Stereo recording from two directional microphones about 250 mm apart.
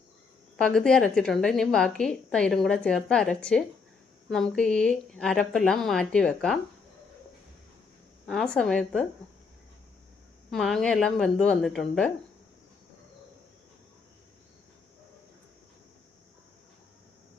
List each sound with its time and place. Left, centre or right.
0.5 s a woman's voice: centre
8.3 s a woman's voice: centre
10.5 s a woman's voice: centre